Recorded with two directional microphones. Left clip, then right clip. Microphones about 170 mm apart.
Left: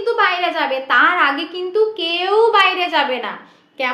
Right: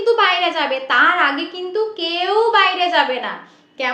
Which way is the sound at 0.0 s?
10° right (ahead or behind).